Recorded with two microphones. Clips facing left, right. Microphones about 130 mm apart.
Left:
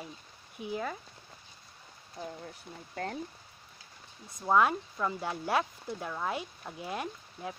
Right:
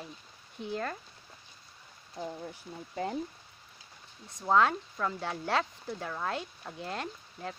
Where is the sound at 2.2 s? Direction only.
10° right (ahead or behind).